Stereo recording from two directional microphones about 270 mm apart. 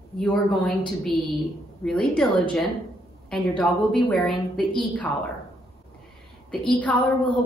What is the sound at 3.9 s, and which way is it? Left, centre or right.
Speech, centre.